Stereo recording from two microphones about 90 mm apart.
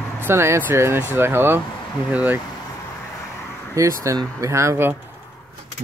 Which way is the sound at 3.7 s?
35° right (ahead or behind).